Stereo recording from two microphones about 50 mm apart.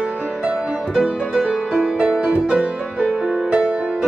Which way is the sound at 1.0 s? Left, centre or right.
Right.